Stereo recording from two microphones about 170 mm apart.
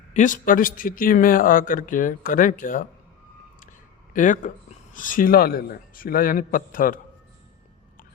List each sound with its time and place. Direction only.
0.1 s speech: 50° left (ahead or behind)
4.1 s speech: 50° left (ahead or behind)